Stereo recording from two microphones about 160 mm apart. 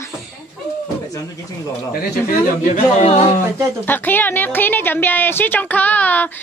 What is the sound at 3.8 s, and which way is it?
A woman's voice, 10° left (ahead or behind).